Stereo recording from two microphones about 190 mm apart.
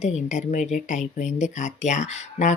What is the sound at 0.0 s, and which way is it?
Speech, 40° left (ahead or behind).